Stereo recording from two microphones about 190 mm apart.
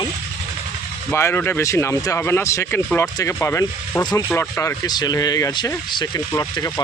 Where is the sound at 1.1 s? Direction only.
10° left (ahead or behind).